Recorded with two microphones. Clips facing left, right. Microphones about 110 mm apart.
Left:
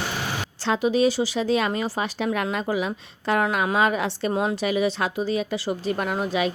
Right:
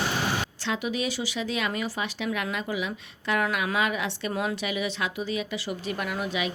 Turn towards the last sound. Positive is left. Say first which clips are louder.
# left 5 dB
turn(degrees=35)  # may be behind; listen again after turning